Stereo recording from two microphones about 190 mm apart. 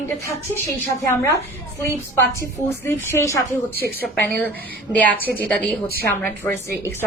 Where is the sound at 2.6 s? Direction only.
15° left (ahead or behind).